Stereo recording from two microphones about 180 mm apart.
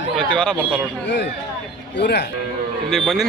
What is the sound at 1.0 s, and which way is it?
Speech, 75° left (ahead or behind).